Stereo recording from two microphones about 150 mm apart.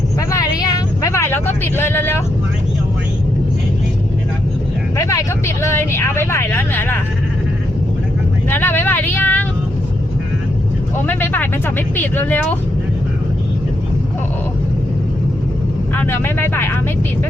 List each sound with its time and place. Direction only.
0.3 s vehicle: 25° left (ahead or behind)
4.9 s speech: 20° left (ahead or behind)
8.4 s speech: 15° left (ahead or behind)
11.0 s speech: 10° left (ahead or behind)
16.0 s speech: 15° left (ahead or behind)